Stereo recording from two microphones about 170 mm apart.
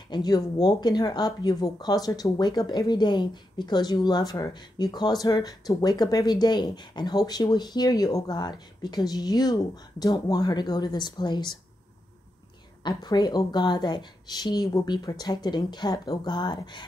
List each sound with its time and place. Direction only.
0.1 s speech: 25° left (ahead or behind)
12.8 s speech: 25° left (ahead or behind)